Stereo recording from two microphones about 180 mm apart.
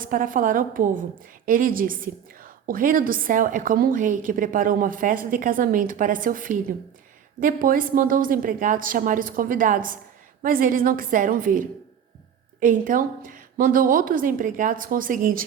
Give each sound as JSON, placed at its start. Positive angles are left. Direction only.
{"t": 0.0, "sound": "a woman's voice", "side_deg": -50}